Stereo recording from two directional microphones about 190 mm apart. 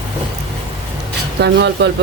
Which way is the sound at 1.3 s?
65° right (ahead or behind).